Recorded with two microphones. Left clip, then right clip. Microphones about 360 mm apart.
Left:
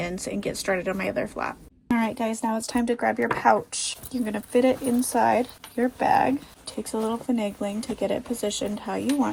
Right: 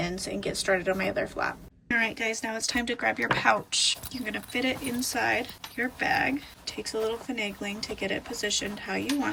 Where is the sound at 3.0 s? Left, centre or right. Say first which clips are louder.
Left 2 dB; centre.